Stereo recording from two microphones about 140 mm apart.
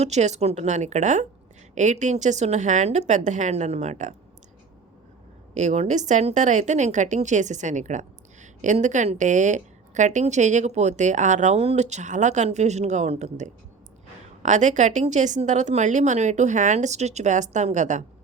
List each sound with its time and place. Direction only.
0.0 s a woman's voice: 55° right (ahead or behind)
5.5 s a woman's voice: 55° right (ahead or behind)